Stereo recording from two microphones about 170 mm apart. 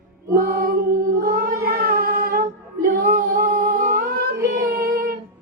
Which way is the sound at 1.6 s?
60° right (ahead or behind).